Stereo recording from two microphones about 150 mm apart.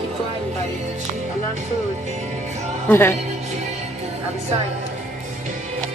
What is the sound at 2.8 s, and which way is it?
Speech, 15° left (ahead or behind).